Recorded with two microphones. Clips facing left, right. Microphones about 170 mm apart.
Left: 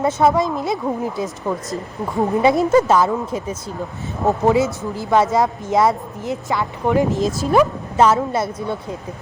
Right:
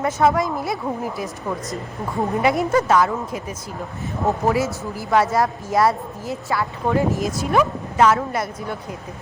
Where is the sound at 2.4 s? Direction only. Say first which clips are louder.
Left 5 dB; 25° left (ahead or behind).